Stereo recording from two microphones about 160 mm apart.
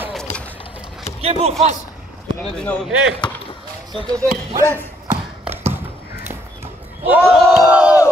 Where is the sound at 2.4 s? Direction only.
5° left (ahead or behind).